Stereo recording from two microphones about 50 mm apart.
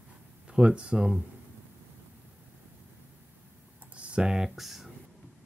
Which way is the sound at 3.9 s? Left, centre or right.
Right.